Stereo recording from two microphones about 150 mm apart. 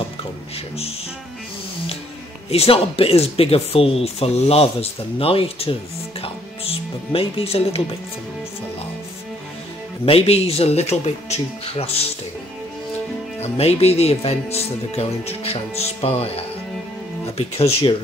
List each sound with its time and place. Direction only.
2.5 s speech: 40° left (ahead or behind)
6.2 s music: 40° left (ahead or behind)
10.0 s speech: 40° left (ahead or behind)
13.4 s speech: 45° left (ahead or behind)
17.4 s speech: 40° left (ahead or behind)